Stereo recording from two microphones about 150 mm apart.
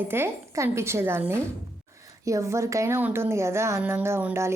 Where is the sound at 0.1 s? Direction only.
20° right (ahead or behind).